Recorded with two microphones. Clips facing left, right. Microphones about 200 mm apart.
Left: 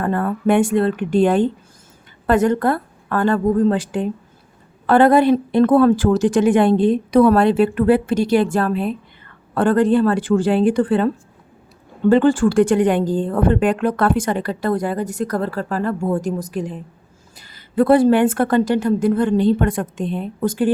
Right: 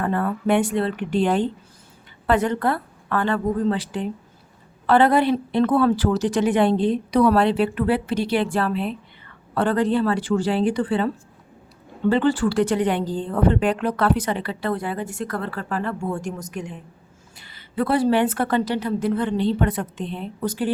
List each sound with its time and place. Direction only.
0.0 s speech: 45° left (ahead or behind)